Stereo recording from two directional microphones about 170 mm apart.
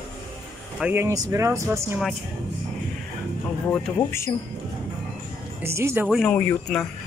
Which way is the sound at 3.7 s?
15° left (ahead or behind).